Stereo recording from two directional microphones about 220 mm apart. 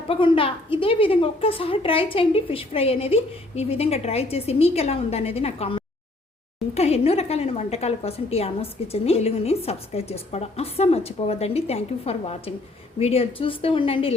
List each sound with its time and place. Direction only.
0.1 s a woman's voice: 25° left (ahead or behind)